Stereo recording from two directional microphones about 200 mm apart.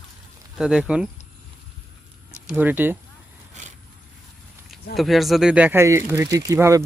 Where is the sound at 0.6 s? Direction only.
5° right (ahead or behind).